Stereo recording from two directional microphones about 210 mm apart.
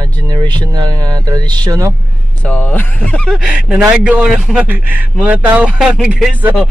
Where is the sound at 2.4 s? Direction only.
5° left (ahead or behind).